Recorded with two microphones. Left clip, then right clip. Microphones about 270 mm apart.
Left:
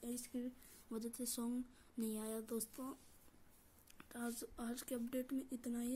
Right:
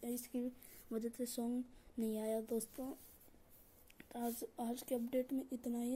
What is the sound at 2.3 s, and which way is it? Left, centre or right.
Speech, centre.